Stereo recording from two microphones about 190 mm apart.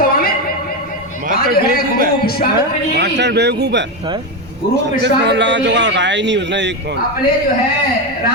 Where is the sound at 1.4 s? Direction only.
55° left (ahead or behind).